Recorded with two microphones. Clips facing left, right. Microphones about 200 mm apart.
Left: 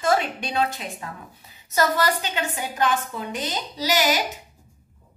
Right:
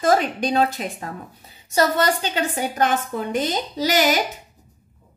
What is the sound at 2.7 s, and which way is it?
A woman's voice, 45° right (ahead or behind).